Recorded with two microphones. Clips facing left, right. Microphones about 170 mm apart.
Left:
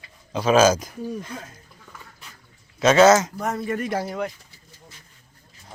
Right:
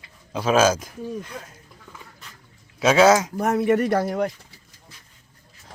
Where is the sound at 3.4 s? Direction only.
65° right (ahead or behind); by 4.3 s 50° right (ahead or behind).